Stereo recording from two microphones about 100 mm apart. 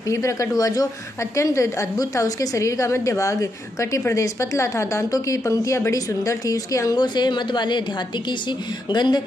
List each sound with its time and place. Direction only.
0.1 s a woman's voice: 30° left (ahead or behind)
7.0 s speech: 50° left (ahead or behind)